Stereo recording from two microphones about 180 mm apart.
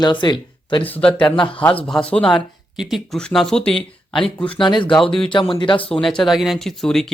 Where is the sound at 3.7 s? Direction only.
30° left (ahead or behind).